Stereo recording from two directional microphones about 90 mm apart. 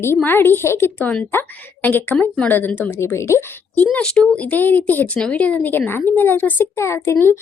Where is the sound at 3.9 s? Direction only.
10° left (ahead or behind).